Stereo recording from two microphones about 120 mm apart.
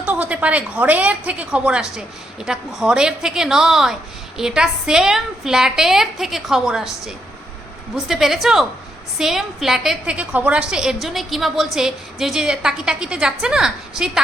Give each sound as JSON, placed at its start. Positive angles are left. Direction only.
{"t": 0.0, "sound": "a woman's voice", "side_deg": -10}